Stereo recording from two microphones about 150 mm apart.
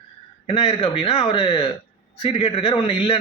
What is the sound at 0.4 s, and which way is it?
A man's voice, 45° left (ahead or behind).